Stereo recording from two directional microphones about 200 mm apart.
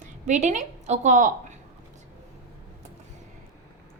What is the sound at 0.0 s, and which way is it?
A woman's voice, 35° right (ahead or behind).